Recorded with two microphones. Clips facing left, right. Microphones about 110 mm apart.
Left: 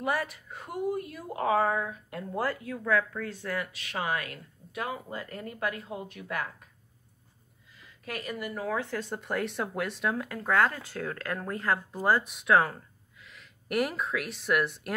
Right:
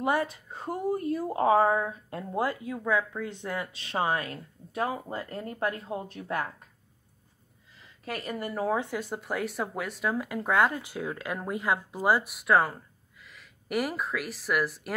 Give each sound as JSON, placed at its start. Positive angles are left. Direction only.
{"t": 0.0, "sound": "a woman's voice", "side_deg": -25}
{"t": 8.0, "sound": "speech", "side_deg": -30}
{"t": 8.7, "sound": "speech", "side_deg": -15}